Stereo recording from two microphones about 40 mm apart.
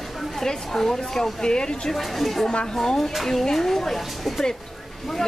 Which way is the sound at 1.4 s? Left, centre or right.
Centre.